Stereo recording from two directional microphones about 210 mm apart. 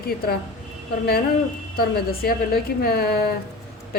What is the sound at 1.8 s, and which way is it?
A woman's voice, 45° left (ahead or behind).